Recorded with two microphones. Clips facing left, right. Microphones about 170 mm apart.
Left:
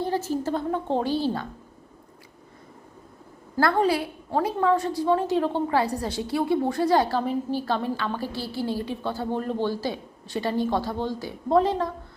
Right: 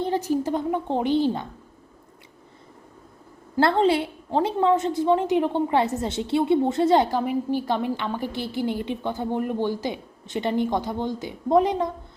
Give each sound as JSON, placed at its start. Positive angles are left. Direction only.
{"t": 0.0, "sound": "a woman's voice", "side_deg": -15}
{"t": 3.6, "sound": "a woman's voice", "side_deg": -25}